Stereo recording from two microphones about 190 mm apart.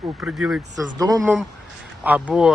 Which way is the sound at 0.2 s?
5° right (ahead or behind).